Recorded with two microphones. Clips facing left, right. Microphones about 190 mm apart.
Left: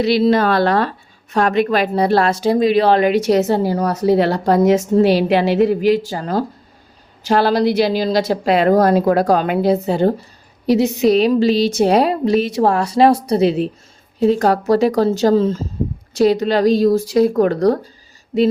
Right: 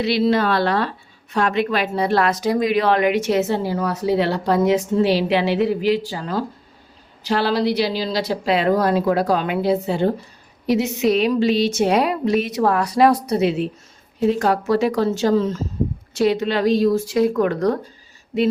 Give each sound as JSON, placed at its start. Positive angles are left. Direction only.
{"t": 0.0, "sound": "a woman's voice", "side_deg": 40}